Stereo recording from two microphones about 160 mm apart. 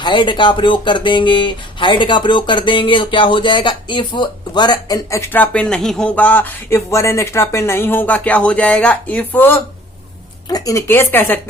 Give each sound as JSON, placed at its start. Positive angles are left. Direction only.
{"t": 0.0, "sound": "speech", "side_deg": 30}